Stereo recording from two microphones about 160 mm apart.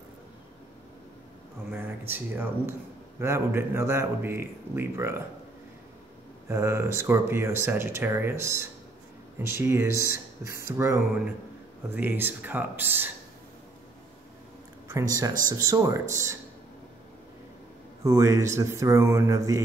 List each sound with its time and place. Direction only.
1.7 s speech: 10° right (ahead or behind)
6.5 s speech: 15° right (ahead or behind)
14.9 s speech: 25° right (ahead or behind)
18.0 s speech: 20° right (ahead or behind)